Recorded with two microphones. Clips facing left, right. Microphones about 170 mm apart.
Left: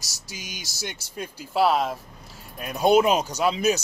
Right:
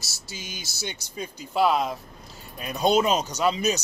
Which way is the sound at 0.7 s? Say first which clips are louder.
Even; 10° left (ahead or behind).